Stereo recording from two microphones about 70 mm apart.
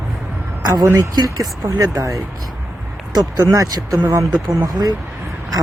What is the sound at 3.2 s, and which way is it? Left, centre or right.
Speech, right.